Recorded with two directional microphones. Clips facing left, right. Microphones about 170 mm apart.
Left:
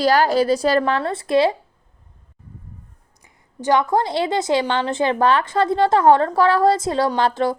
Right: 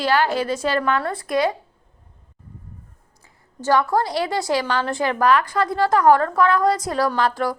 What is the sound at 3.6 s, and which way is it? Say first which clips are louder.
A woman's voice: left 1 dB; 20° left (ahead or behind).